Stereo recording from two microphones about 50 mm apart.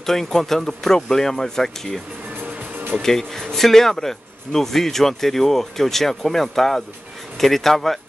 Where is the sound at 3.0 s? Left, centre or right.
Centre.